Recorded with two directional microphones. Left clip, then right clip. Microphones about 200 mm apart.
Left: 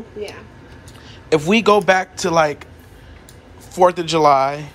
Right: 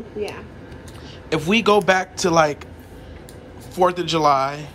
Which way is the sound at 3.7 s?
15° right (ahead or behind).